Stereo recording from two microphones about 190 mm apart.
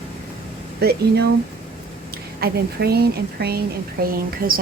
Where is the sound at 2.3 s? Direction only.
55° right (ahead or behind).